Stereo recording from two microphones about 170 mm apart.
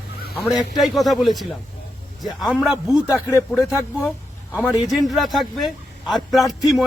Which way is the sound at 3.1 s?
20° left (ahead or behind).